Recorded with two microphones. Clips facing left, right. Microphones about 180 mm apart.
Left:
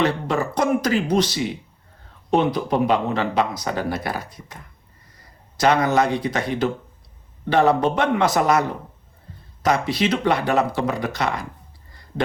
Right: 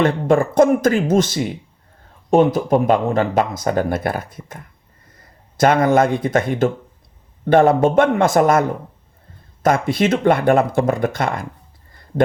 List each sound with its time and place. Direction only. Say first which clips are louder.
0.0 s speech: right 6 dB; 50° right (ahead or behind)
9.6 s speech: right 4 dB; 50° right (ahead or behind)